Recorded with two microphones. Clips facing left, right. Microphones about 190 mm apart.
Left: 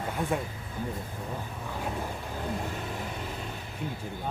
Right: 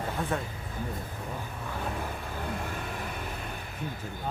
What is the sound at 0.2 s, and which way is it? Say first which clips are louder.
Speech: left 3 dB; 15° left (ahead or behind).